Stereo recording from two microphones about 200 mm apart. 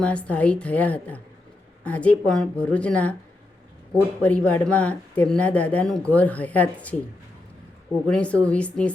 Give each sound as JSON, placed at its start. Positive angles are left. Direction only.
{"t": 0.0, "sound": "speech", "side_deg": 5}
{"t": 4.2, "sound": "speech", "side_deg": 5}
{"t": 8.0, "sound": "a woman's voice", "side_deg": 5}